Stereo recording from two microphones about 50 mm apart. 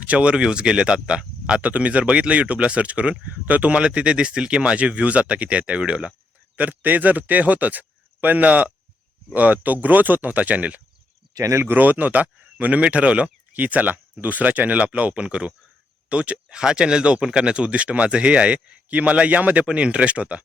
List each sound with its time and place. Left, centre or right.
0.0 s speech: right
6.6 s speech: right
11.3 s speech: right
11.6 s speech: right